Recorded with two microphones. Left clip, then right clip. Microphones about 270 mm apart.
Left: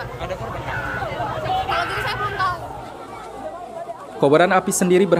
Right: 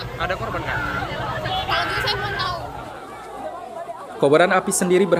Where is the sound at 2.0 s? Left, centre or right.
Centre.